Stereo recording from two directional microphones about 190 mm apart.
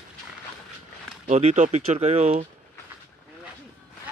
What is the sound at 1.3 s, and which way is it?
Speech, 35° right (ahead or behind).